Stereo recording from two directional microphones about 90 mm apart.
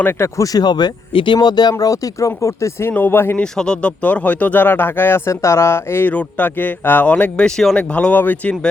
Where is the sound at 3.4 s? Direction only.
10° left (ahead or behind).